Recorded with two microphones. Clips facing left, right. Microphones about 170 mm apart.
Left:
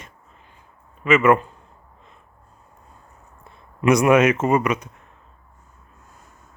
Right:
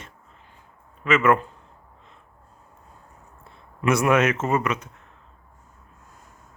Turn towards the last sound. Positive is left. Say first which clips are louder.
# left 4 dB
turn(degrees=15)  # may be behind; listen again after turning